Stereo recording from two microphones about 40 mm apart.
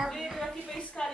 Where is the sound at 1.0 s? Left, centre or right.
Centre.